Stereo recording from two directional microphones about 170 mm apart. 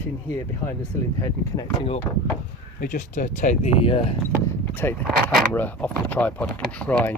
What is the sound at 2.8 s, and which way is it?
Speech, 50° left (ahead or behind).